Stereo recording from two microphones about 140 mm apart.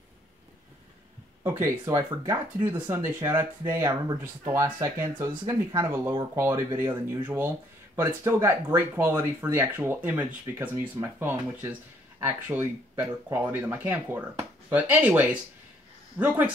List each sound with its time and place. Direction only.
1.4 s speech: 20° right (ahead or behind)
5.4 s speech: 35° right (ahead or behind)
5.8 s speech: 15° right (ahead or behind)